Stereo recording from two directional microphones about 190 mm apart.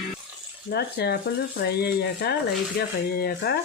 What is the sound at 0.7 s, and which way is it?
Speech, 60° left (ahead or behind).